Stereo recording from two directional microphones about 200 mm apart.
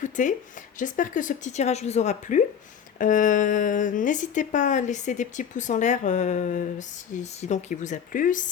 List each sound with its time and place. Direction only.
0.0 s speech: 40° left (ahead or behind)